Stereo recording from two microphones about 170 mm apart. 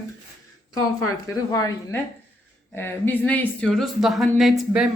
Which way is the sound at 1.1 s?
20° left (ahead or behind).